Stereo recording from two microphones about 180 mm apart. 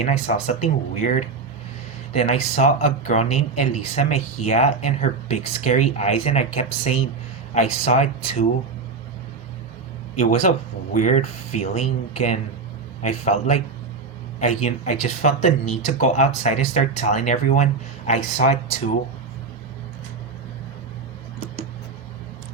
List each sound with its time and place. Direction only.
0.0 s speech: 40° left (ahead or behind)
10.2 s speech: 40° left (ahead or behind)
13.0 s speech: 40° left (ahead or behind)